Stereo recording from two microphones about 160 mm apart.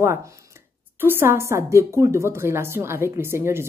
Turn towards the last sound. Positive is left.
turn(degrees=-15)  # may be behind; listen again after turning